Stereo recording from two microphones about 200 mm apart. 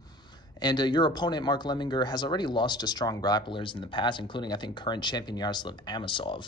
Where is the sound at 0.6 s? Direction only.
20° left (ahead or behind).